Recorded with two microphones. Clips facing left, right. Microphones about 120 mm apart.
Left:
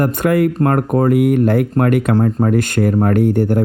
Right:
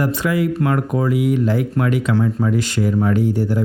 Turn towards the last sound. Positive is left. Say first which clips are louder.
# left 4 dB
turn(degrees=55)  # may be behind; listen again after turning